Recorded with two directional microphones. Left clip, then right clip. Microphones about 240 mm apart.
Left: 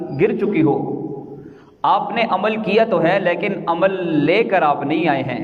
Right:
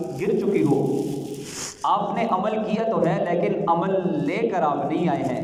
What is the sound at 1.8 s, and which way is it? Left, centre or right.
A man's voice, left.